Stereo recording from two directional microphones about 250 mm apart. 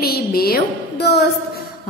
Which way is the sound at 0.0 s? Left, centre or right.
Left.